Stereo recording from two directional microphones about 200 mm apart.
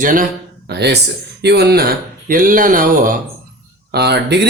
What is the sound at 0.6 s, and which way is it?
Speech, 55° right (ahead or behind).